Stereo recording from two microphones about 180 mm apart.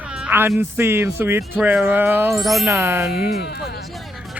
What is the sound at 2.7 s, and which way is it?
Speech, 15° right (ahead or behind).